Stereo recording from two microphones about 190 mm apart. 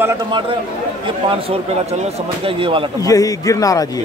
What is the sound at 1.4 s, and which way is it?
Speech, 35° right (ahead or behind).